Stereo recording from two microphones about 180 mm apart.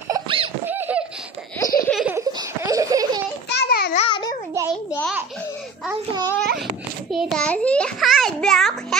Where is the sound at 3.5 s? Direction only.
65° left (ahead or behind).